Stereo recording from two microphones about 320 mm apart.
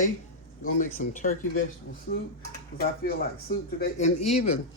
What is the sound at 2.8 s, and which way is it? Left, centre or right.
Speech, left.